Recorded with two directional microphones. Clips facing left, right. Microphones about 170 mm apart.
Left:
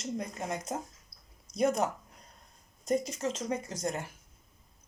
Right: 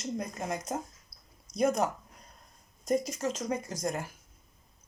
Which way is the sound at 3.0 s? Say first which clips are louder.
Right 1 dB; 30° left (ahead or behind).